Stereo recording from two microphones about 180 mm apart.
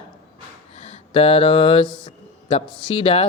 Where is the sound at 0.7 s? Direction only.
35° left (ahead or behind).